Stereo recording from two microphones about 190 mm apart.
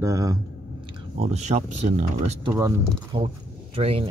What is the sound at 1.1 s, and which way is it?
Speech, 35° right (ahead or behind).